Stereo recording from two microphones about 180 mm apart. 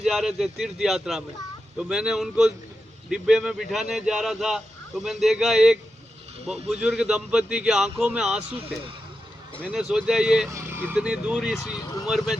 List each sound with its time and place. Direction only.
0.0 s speech: centre (ahead or behind)
6.8 s speech: 5° right (ahead or behind)
8.5 s a man's voice: 30° right (ahead or behind)
9.6 s speech: 5° right (ahead or behind)
10.5 s speech: 15° right (ahead or behind)